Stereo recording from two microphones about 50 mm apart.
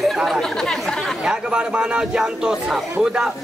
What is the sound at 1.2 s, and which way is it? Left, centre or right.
A man's voice, centre.